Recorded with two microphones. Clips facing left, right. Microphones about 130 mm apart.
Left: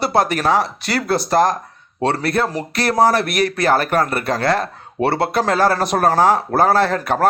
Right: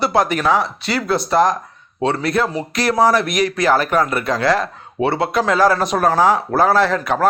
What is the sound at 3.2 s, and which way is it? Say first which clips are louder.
Speech: even; 60° left (ahead or behind).